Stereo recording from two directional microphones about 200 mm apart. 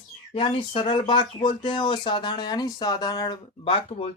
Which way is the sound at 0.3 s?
25° left (ahead or behind).